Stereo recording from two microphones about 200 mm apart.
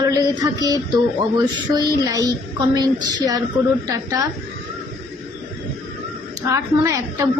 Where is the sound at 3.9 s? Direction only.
15° right (ahead or behind).